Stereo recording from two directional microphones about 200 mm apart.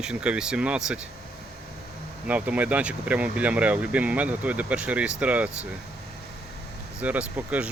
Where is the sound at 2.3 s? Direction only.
5° right (ahead or behind).